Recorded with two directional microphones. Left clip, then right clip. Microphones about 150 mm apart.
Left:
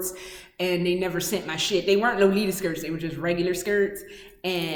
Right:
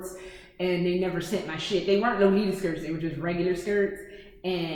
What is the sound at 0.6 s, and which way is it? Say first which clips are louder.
A woman's voice: left 2 dB; 15° left (ahead or behind).